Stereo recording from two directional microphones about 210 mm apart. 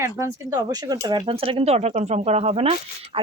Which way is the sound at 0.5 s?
15° right (ahead or behind).